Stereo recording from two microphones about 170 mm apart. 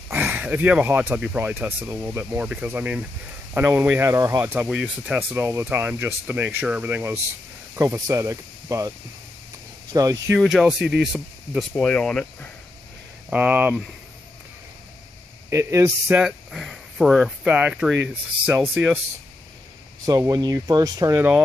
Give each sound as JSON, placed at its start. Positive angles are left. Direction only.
{"t": 0.1, "sound": "speech", "side_deg": -10}
{"t": 9.9, "sound": "speech", "side_deg": -20}
{"t": 10.4, "sound": "speech", "side_deg": 0}
{"t": 13.3, "sound": "speech", "side_deg": -10}
{"t": 15.5, "sound": "speech", "side_deg": -15}
{"t": 16.3, "sound": "speech", "side_deg": 0}
{"t": 20.1, "sound": "speech", "side_deg": -20}